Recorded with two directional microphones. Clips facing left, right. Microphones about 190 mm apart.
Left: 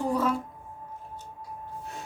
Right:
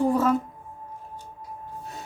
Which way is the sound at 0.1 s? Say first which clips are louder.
Right 4 dB; 45° right (ahead or behind).